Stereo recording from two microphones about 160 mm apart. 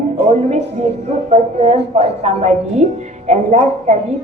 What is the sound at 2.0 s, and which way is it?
Speech, 45° right (ahead or behind).